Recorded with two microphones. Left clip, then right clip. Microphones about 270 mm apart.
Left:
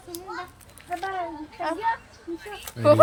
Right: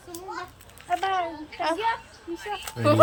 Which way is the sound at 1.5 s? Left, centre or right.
Centre.